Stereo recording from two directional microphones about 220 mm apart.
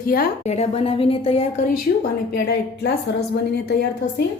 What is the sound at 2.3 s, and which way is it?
Speech, 45° left (ahead or behind).